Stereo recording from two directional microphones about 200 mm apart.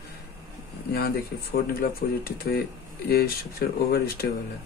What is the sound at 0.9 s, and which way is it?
Speech, 50° left (ahead or behind).